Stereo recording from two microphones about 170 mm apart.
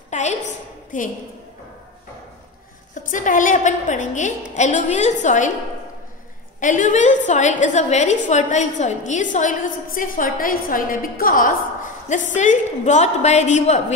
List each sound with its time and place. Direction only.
0.1 s a sound: 45° left (ahead or behind)
0.9 s a woman's voice: 50° left (ahead or behind)
2.9 s a woman's voice: 50° left (ahead or behind)
6.6 s a woman's voice: 50° left (ahead or behind)